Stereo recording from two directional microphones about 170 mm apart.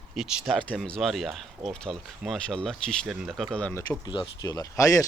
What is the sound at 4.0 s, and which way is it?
Speech, 25° left (ahead or behind).